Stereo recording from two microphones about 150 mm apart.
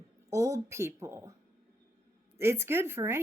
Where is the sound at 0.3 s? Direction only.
20° right (ahead or behind).